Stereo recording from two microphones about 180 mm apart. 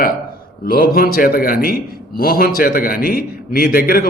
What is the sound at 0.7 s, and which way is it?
A man's voice, 55° left (ahead or behind).